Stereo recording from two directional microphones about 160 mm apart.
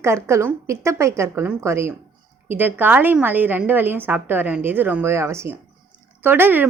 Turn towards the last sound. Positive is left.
turn(degrees=-10)  # may be behind; listen again after turning